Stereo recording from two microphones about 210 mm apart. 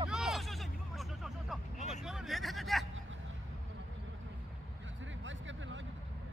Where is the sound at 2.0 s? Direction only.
Centre (ahead or behind).